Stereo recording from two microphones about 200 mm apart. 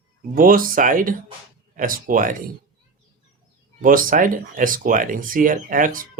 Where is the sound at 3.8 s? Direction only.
45° right (ahead or behind).